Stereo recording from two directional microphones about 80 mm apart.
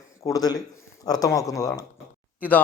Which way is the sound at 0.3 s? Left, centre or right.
Left.